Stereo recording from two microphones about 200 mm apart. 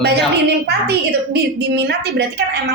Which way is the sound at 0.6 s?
55° right (ahead or behind).